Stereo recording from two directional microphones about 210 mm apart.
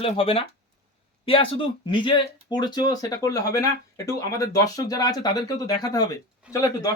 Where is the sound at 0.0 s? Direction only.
25° left (ahead or behind).